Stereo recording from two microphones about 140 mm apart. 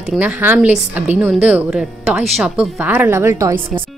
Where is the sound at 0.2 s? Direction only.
15° right (ahead or behind).